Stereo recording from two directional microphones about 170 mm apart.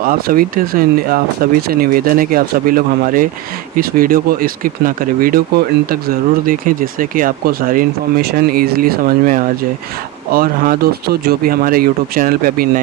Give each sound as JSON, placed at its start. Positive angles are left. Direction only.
{"t": 0.0, "sound": "speech", "side_deg": -55}